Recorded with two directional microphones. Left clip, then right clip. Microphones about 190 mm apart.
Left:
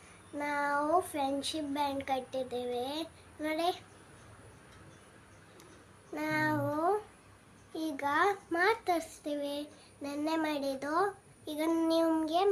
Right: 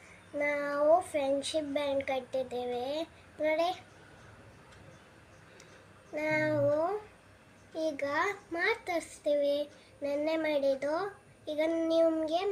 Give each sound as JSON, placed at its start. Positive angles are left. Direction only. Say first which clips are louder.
{"t": 0.4, "sound": "child singing", "louder": "right 4 dB", "side_deg": 25}
{"t": 6.1, "sound": "child singing", "louder": "right 2 dB", "side_deg": 30}
{"t": 7.7, "sound": "child singing", "louder": "right 1 dB", "side_deg": 25}